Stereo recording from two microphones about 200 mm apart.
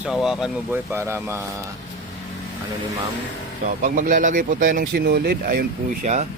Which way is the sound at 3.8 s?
40° right (ahead or behind).